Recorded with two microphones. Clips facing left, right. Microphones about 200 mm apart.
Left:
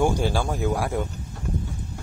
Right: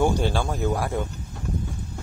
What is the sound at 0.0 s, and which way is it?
Speech, 10° left (ahead or behind).